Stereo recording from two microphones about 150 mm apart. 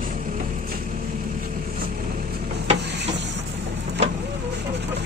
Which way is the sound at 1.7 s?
75° right (ahead or behind).